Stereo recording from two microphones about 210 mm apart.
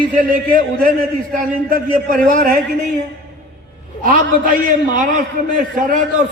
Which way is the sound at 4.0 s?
40° right (ahead or behind).